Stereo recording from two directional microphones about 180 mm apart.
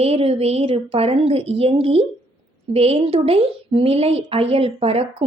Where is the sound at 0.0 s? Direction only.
35° right (ahead or behind).